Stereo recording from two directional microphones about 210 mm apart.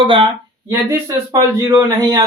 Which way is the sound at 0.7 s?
15° right (ahead or behind).